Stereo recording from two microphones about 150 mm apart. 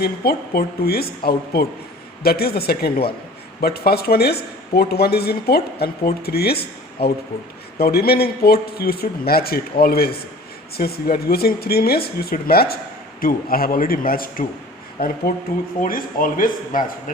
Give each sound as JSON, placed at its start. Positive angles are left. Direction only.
{"t": 0.0, "sound": "speech", "side_deg": 90}
{"t": 13.2, "sound": "a man's voice", "side_deg": 75}